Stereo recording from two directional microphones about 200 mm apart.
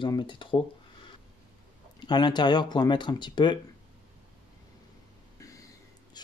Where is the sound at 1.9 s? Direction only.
20° left (ahead or behind).